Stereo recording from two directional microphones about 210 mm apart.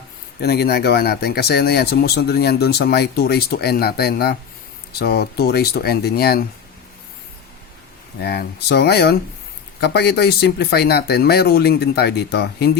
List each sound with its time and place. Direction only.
0.4 s speech: 50° left (ahead or behind)
8.2 s speech: 50° left (ahead or behind)